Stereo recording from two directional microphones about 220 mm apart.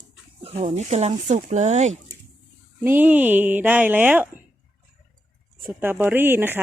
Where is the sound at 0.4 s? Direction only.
30° right (ahead or behind).